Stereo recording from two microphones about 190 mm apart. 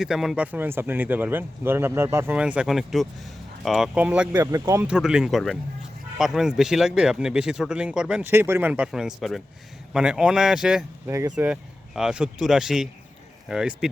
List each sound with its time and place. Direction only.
0.0 s speech: centre (ahead or behind)